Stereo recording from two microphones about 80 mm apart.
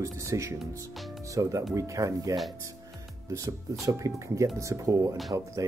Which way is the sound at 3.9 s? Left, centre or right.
Right.